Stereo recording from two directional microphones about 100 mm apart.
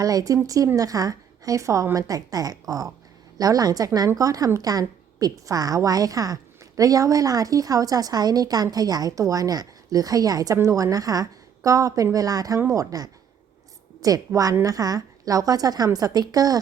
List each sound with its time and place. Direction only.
0.0 s a woman's voice: 35° right (ahead or behind)